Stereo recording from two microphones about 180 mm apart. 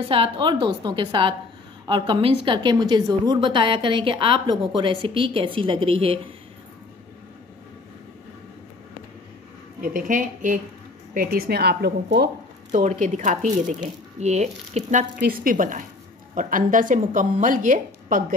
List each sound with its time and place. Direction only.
0.1 s a woman's voice: 30° right (ahead or behind)
9.8 s a woman's voice: 50° right (ahead or behind)
11.1 s a woman's voice: 55° right (ahead or behind)
12.7 s a woman's voice: 40° right (ahead or behind)
15.2 s a woman's voice: 50° right (ahead or behind)